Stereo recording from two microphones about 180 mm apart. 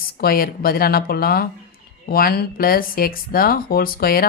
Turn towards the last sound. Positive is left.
turn(degrees=55)  # may be behind; listen again after turning